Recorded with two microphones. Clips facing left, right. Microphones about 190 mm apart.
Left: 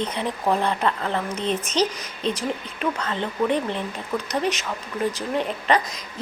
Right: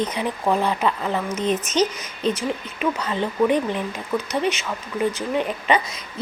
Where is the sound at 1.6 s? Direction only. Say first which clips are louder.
Even; 35° left (ahead or behind).